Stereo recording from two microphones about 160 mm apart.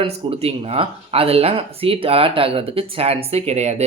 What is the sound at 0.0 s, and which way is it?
Speech, 40° right (ahead or behind).